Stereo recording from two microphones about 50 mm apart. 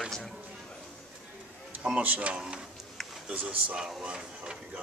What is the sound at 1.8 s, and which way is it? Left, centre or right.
Speech, right.